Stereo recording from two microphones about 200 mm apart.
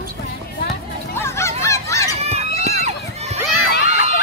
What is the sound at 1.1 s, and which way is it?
Honk, 15° left (ahead or behind).